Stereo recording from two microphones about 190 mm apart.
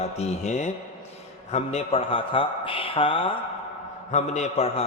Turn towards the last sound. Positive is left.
turn(degrees=35)  # may be behind; listen again after turning